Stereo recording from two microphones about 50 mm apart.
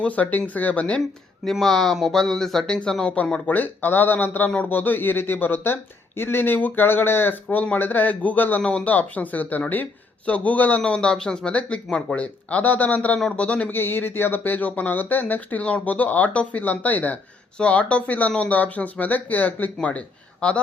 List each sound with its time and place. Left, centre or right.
0.0 s speech: left
1.6 s speech: centre
3.0 s speech: left
3.4 s speech: left
8.6 s speech: left
10.8 s speech: left
12.1 s speech: left
13.7 s speech: left